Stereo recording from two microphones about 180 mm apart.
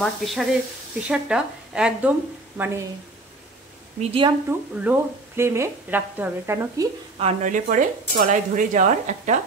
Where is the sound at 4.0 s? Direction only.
30° right (ahead or behind).